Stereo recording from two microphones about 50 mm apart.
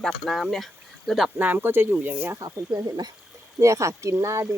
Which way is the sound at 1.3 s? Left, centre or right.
Right.